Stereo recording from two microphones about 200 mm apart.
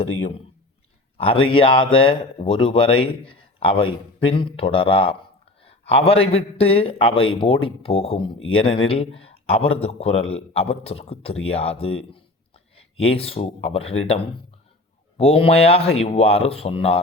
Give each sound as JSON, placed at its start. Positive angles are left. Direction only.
{"t": 1.5, "sound": "speech", "side_deg": 25}
{"t": 5.6, "sound": "a sound", "side_deg": 30}
{"t": 6.3, "sound": "speech", "side_deg": 30}
{"t": 13.1, "sound": "speech", "side_deg": 30}
{"t": 15.2, "sound": "speech", "side_deg": 30}